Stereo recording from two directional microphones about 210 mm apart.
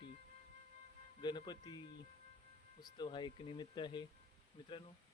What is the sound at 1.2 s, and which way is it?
Speech, 20° left (ahead or behind).